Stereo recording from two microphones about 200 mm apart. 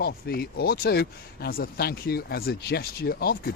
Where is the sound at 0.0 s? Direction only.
50° left (ahead or behind).